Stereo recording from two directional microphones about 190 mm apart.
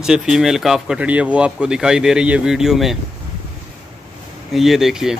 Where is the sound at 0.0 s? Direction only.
5° right (ahead or behind).